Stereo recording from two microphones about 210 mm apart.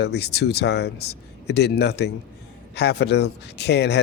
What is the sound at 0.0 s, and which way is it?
Speech, 50° left (ahead or behind).